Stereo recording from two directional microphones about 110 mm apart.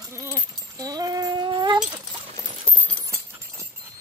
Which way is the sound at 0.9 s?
35° right (ahead or behind).